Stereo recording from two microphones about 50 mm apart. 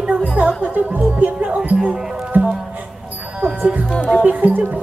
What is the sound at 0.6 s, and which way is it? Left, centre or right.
Music, right.